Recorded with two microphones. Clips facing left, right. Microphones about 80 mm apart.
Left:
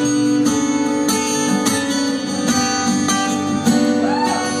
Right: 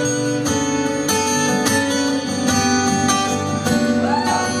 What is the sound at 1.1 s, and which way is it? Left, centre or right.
Music, right.